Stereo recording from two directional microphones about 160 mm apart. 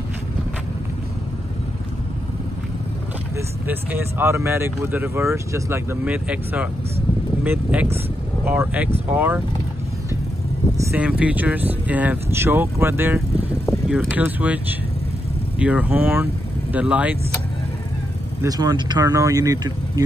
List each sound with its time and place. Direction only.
3.3 s speech: 15° right (ahead or behind)
10.8 s speech: 10° right (ahead or behind)
18.4 s speech: 25° right (ahead or behind)